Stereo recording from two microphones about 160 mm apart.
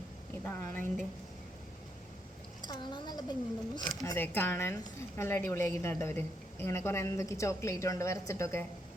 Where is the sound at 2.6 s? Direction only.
25° left (ahead or behind).